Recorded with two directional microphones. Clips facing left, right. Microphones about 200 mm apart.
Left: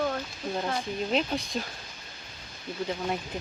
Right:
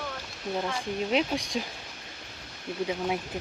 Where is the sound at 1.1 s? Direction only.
15° right (ahead or behind).